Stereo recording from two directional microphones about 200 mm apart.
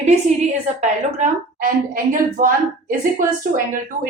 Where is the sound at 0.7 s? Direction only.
35° right (ahead or behind).